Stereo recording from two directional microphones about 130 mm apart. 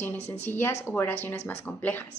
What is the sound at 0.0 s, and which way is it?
A woman's voice, 15° left (ahead or behind).